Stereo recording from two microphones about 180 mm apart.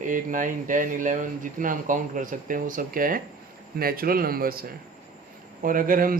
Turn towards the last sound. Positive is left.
turn(degrees=-50)  # may be behind; listen again after turning